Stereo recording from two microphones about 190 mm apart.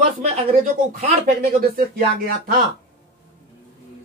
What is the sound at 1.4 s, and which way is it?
Speech, 50° right (ahead or behind).